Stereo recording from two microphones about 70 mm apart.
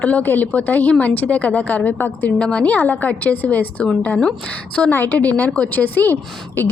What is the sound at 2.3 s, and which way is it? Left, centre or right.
A woman's voice, centre.